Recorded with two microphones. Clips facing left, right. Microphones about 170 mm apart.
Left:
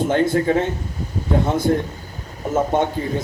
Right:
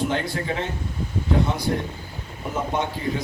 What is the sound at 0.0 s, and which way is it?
Speech, 50° left (ahead or behind).